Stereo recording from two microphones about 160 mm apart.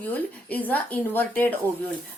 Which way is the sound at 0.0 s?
10° left (ahead or behind).